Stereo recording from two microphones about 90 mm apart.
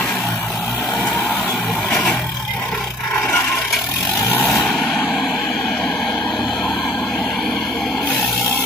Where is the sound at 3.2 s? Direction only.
25° left (ahead or behind).